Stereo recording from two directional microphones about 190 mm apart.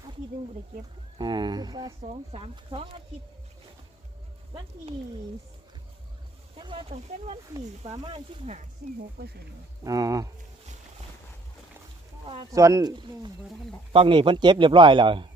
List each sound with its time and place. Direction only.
1.2 s a man's voice: 25° right (ahead or behind)
2.0 s speech: 30° right (ahead or behind)
6.6 s a man's voice: 25° right (ahead or behind)
9.2 s speech: 55° right (ahead or behind)
9.8 s a man's voice: 20° right (ahead or behind)
12.5 s a man's voice: 15° right (ahead or behind)